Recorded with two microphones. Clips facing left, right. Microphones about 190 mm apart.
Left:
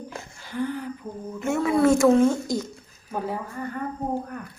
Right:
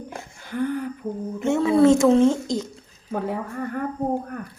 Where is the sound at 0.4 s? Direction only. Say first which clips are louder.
Right 3 dB; 55° right (ahead or behind).